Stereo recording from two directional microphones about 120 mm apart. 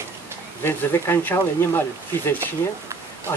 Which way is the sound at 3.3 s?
25° left (ahead or behind).